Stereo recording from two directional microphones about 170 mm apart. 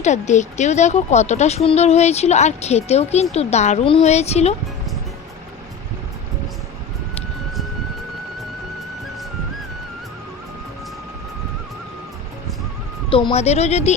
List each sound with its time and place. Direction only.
0.0 s speech: 45° left (ahead or behind)
13.1 s speech: 30° left (ahead or behind)